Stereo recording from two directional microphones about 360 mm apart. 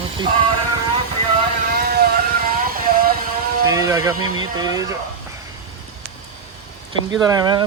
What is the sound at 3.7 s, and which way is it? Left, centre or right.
Speech, centre.